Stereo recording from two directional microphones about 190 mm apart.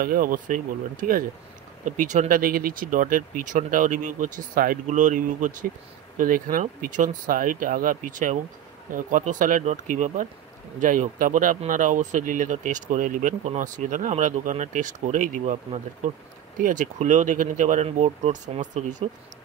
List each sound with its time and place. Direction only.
0.0 s speech: 50° right (ahead or behind)